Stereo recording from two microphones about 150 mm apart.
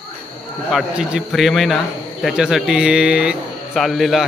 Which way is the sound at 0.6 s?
5° right (ahead or behind).